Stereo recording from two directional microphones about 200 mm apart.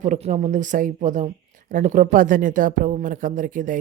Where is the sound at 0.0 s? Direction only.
40° right (ahead or behind).